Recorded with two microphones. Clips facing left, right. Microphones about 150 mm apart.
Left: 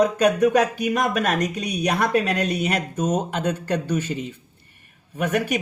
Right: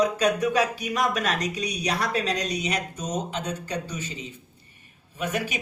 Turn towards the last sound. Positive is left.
turn(degrees=55)  # may be behind; listen again after turning